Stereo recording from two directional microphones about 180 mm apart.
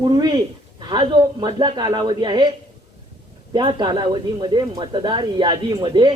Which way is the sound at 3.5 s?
25° right (ahead or behind).